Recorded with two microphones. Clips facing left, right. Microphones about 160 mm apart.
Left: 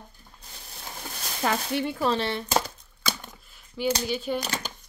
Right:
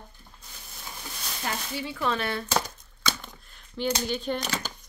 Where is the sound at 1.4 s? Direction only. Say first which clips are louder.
Left 7 dB; 80° left; by 2.0 s 65° left (ahead or behind).